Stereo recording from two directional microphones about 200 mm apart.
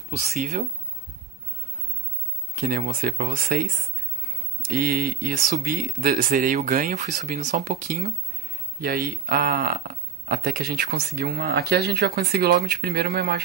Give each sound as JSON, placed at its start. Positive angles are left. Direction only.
{"t": 0.2, "sound": "speech", "side_deg": -35}
{"t": 2.5, "sound": "speech", "side_deg": -40}